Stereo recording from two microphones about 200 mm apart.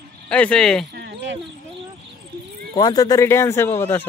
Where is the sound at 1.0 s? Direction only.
55° right (ahead or behind).